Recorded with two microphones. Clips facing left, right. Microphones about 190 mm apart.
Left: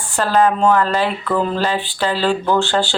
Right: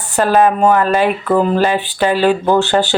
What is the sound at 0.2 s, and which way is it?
Speech, 15° right (ahead or behind).